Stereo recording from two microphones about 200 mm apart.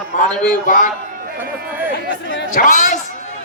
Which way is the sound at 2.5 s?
45° left (ahead or behind).